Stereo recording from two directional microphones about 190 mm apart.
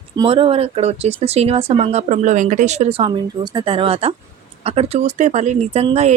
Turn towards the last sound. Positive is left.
turn(degrees=-35)  # may be behind; listen again after turning